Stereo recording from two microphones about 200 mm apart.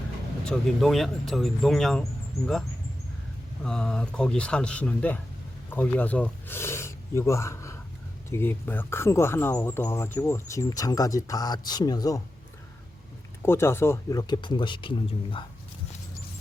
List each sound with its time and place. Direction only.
0.4 s speech: centre (ahead or behind)
3.6 s speech: 5° left (ahead or behind); by 12.2 s 20° left (ahead or behind)
13.4 s speech: 10° left (ahead or behind)